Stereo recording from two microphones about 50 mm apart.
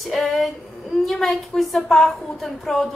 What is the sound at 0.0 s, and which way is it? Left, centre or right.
A woman's voice, centre.